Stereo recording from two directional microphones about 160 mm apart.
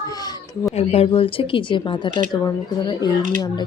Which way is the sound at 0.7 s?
40° left (ahead or behind).